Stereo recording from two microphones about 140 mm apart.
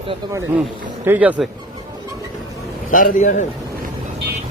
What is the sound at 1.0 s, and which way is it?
Speech, 15° right (ahead or behind).